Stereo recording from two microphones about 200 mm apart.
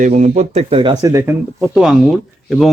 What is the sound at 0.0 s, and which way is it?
Speech, 35° right (ahead or behind).